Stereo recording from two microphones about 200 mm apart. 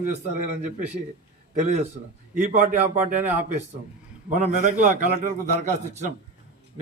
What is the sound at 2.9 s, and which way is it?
Speech, 40° right (ahead or behind).